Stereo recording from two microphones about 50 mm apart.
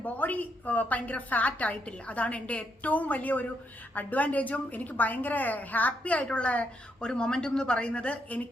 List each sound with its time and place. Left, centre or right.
0.0 s a woman's voice: left
7.0 s speech: centre